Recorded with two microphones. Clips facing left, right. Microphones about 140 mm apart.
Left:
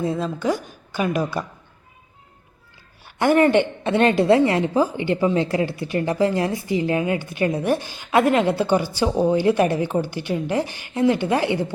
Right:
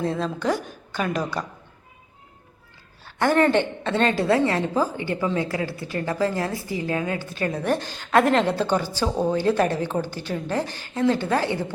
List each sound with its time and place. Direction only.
0.0 s a woman's voice: centre (ahead or behind)
3.0 s a woman's voice: 15° left (ahead or behind)